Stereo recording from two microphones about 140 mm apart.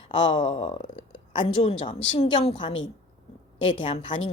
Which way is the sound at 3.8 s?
35° left (ahead or behind).